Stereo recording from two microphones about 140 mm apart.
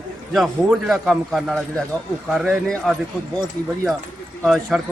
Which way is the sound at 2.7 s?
Centre (ahead or behind).